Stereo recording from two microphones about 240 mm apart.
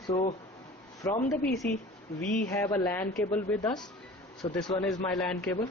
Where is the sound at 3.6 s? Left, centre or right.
Centre.